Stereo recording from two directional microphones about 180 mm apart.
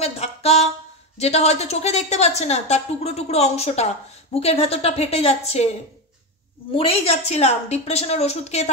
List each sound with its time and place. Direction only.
0.0 s a woman's voice: 35° left (ahead or behind)
6.7 s a woman's voice: 30° left (ahead or behind)